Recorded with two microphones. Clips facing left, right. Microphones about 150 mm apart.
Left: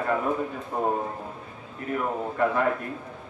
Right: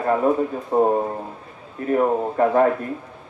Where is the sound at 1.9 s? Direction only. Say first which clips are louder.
Right 9 dB; 35° right (ahead or behind).